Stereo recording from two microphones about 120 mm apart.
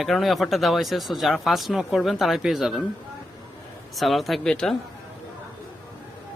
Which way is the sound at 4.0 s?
Centre (ahead or behind).